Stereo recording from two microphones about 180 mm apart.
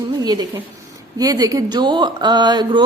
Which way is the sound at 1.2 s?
20° right (ahead or behind).